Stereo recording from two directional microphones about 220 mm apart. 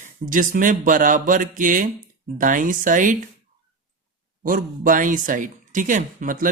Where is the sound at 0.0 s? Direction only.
35° right (ahead or behind).